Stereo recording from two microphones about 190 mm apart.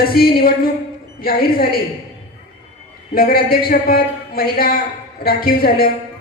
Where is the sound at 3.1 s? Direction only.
50° left (ahead or behind).